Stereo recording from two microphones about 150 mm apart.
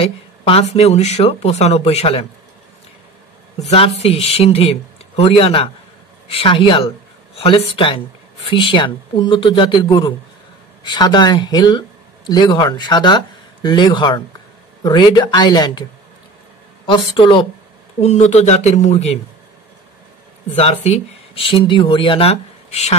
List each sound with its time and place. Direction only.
0.0 s speech: 40° left (ahead or behind)
3.5 s speech: 45° left (ahead or behind)
16.8 s speech: 35° left (ahead or behind)
18.0 s speech: 50° left (ahead or behind)
20.5 s speech: 40° left (ahead or behind)